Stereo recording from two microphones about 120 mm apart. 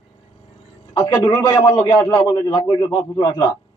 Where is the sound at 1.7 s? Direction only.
35° left (ahead or behind).